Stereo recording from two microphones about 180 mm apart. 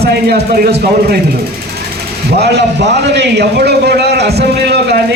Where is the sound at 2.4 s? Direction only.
70° right (ahead or behind).